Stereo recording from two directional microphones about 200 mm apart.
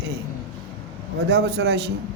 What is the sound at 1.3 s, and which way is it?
Speech, 55° right (ahead or behind).